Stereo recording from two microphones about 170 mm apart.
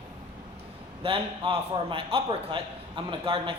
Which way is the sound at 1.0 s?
30° right (ahead or behind).